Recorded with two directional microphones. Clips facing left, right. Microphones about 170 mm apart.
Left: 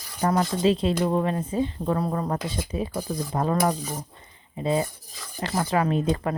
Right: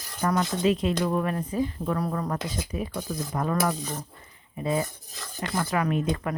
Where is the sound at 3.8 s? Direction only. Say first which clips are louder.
Left 1 dB; 10° left (ahead or behind).